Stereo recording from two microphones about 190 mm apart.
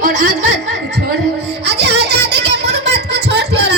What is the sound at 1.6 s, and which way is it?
Music, 60° right (ahead or behind).